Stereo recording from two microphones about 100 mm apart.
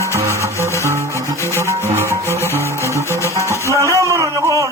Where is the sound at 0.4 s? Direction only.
25° right (ahead or behind).